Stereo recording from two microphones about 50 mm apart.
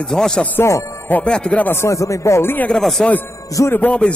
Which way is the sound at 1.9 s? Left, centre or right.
Left.